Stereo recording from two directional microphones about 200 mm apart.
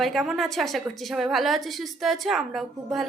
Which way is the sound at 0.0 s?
Centre (ahead or behind).